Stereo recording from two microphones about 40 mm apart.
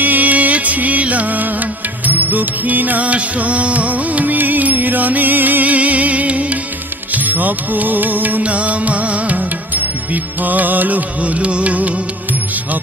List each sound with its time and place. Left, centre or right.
0.0 s music: right
8.4 s music: right